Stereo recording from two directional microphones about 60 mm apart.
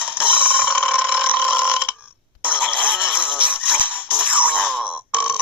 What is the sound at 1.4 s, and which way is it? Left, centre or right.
Burping, centre.